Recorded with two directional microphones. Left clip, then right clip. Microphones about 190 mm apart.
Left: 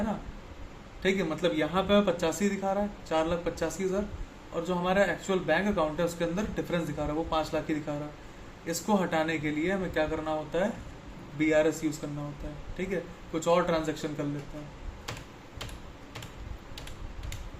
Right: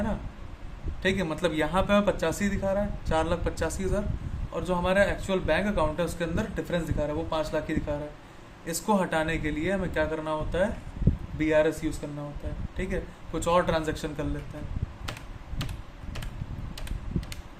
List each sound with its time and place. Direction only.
1.0 s speech: 30° right (ahead or behind)